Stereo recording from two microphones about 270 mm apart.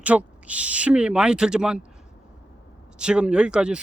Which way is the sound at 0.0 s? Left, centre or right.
Centre.